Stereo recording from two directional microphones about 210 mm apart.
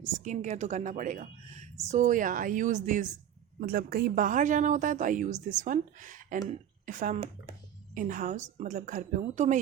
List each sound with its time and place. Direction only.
0.3 s a woman's voice: 35° right (ahead or behind)